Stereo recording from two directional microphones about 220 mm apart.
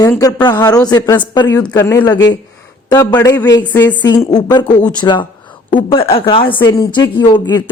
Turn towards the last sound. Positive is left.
turn(degrees=20)  # may be behind; listen again after turning